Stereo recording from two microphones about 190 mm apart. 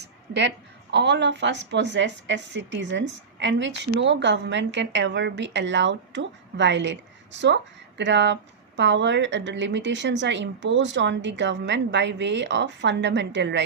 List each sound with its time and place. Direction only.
0.0 s a woman's voice: 65° right (ahead or behind)